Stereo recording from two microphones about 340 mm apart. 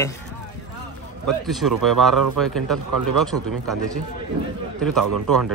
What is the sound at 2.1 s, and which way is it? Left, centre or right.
Speech, right.